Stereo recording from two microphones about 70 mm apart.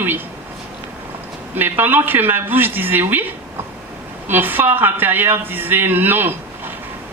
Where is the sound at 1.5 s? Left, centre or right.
Right.